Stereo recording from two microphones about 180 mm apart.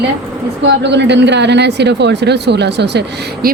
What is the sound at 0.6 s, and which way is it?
A woman's voice, 75° right (ahead or behind).